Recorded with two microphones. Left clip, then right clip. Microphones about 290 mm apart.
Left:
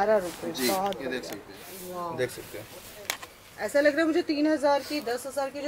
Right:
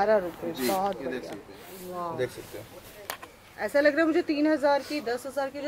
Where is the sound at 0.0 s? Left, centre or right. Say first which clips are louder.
Even; centre.